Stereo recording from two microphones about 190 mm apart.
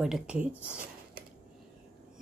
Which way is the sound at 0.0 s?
5° right (ahead or behind).